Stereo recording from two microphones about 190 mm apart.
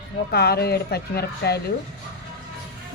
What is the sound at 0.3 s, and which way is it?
A woman's voice, 55° left (ahead or behind).